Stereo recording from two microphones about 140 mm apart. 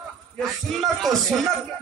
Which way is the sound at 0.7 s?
Centre (ahead or behind).